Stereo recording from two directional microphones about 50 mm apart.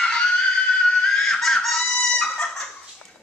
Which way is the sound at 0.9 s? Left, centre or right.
Centre.